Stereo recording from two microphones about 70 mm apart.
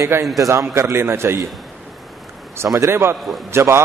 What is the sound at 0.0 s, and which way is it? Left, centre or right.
A man's voice, right.